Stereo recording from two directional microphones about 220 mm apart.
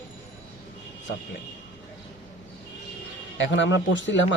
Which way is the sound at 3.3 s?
55° left (ahead or behind).